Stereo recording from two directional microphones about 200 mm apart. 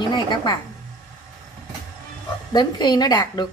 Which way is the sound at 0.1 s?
20° left (ahead or behind).